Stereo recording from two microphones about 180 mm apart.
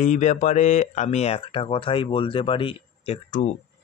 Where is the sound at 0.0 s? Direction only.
40° left (ahead or behind).